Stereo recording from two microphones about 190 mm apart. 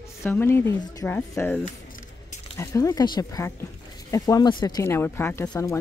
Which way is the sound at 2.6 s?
15° left (ahead or behind).